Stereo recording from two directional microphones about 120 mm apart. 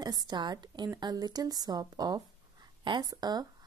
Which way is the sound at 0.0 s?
35° right (ahead or behind).